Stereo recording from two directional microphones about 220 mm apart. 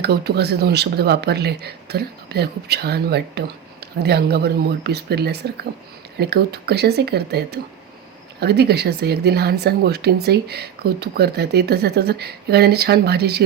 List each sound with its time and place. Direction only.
0.0 s speech: 45° right (ahead or behind)